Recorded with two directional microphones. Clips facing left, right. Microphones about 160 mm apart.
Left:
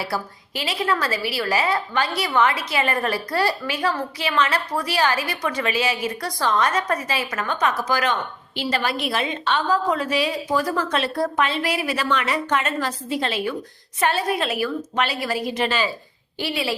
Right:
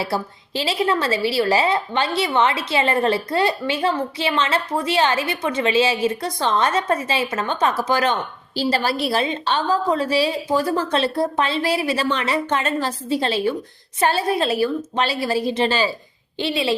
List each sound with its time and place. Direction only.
0.0 s a woman's voice: 25° right (ahead or behind)